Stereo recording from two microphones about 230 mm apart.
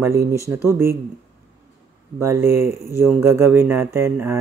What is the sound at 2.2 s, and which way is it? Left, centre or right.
Speech, centre.